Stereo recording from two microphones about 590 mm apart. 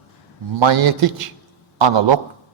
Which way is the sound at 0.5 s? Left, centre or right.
Right.